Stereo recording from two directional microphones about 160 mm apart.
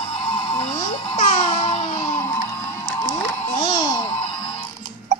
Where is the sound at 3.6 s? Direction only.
30° left (ahead or behind).